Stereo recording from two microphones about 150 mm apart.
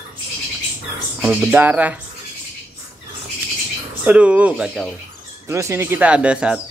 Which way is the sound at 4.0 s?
10° right (ahead or behind).